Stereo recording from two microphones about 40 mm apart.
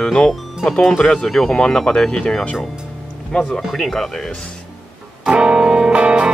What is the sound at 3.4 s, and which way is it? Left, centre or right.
Speech, centre.